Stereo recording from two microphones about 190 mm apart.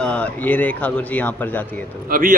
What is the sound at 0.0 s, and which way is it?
Speech, 5° left (ahead or behind).